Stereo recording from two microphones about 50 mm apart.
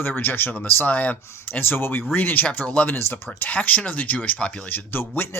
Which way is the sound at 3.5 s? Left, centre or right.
Left.